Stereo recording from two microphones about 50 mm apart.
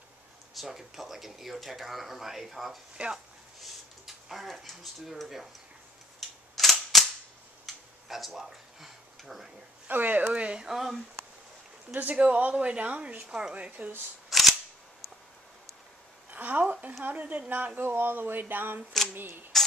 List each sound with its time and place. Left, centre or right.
0.6 s speech: centre
3.0 s speech: right
3.6 s speech: centre
6.1 s cap gun: centre
7.6 s a sound: centre
9.8 s speech: right
10.7 s speech: centre
11.9 s speech: right
12.2 s speech: right
13.3 s speech: centre
13.6 s speech: right
14.3 s cap gun: centre
16.3 s a woman's voice: right
17.8 s speech: right